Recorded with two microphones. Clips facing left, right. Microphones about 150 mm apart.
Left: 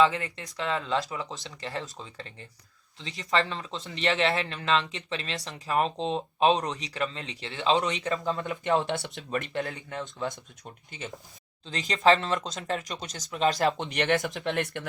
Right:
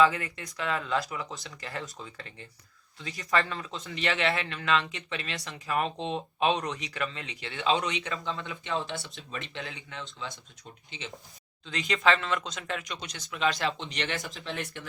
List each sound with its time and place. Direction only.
0.0 s speech: 25° left (ahead or behind)
3.0 s speech: 20° left (ahead or behind); by 10.3 s 50° left (ahead or behind)
11.6 s speech: 35° left (ahead or behind); by 14.8 s 55° left (ahead or behind)